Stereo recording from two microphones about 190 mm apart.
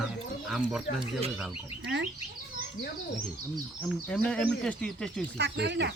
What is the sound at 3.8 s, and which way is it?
Speech, 5° left (ahead or behind).